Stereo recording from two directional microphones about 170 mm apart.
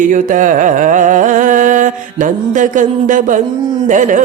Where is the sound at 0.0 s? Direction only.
50° right (ahead or behind).